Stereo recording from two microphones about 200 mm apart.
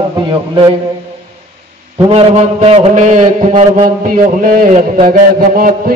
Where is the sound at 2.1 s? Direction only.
30° right (ahead or behind).